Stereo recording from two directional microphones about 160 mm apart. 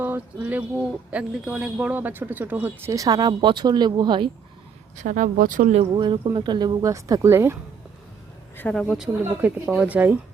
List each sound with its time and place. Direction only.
0.0 s speech: 10° right (ahead or behind); by 4.3 s 30° right (ahead or behind)
4.9 s speech: 55° right (ahead or behind)
5.9 s speech: 30° right (ahead or behind)
8.5 s speech: 5° left (ahead or behind); by 10.2 s 10° right (ahead or behind)